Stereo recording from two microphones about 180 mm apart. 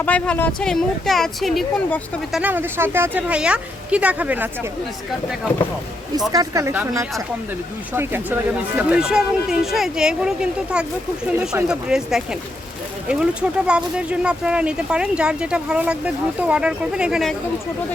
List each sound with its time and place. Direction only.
0.0 s speech: 10° left (ahead or behind); by 4.4 s 10° right (ahead or behind)
6.3 s speech: 20° right (ahead or behind)
7.9 s speech: 10° right (ahead or behind)
13.7 s speech: 5° right (ahead or behind)